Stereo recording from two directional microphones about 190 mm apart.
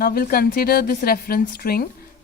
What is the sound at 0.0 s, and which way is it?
A woman's voice, 50° left (ahead or behind).